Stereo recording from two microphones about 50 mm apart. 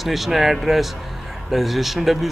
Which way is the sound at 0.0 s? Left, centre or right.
Centre.